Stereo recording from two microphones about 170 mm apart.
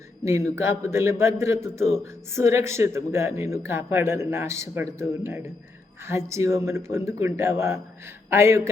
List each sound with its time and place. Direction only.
0.3 s speech: 15° right (ahead or behind)